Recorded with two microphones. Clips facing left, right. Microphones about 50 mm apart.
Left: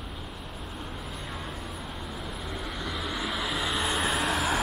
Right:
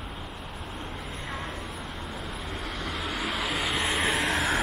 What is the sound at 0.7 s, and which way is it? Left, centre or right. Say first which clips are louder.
Vehicle: right 1 dB; centre.